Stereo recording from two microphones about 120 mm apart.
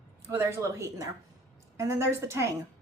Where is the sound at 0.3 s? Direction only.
25° right (ahead or behind).